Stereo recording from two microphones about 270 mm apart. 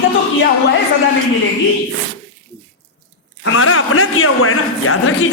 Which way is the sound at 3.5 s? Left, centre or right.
Left.